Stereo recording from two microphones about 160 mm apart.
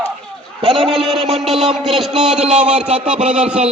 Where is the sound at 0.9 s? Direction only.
Centre (ahead or behind).